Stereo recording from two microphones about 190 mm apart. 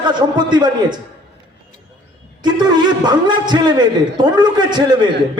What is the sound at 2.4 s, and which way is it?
A man's voice, 20° right (ahead or behind).